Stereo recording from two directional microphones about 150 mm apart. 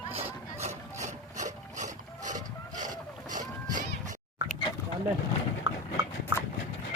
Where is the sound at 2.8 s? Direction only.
60° right (ahead or behind).